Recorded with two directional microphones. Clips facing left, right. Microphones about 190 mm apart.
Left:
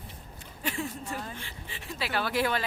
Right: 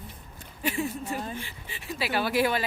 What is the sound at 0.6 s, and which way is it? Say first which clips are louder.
Speech: right 4 dB; 10° right (ahead or behind).